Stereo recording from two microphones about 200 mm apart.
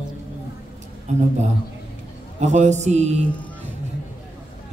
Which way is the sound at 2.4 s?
35° right (ahead or behind).